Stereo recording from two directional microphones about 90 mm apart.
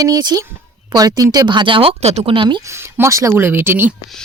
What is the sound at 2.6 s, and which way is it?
Speech, 30° right (ahead or behind).